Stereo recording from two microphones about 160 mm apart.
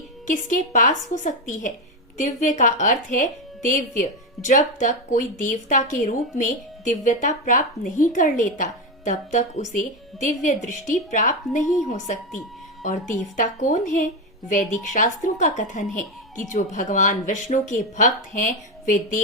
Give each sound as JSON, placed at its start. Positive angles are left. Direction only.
{"t": 0.3, "sound": "speech", "side_deg": 55}